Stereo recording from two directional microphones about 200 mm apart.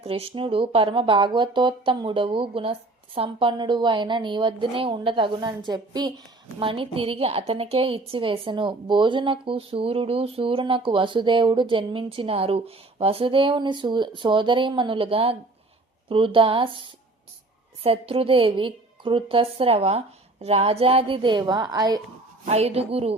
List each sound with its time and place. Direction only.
0.0 s a woman's voice: 30° right (ahead or behind)
22.4 s a woman's voice: 30° right (ahead or behind)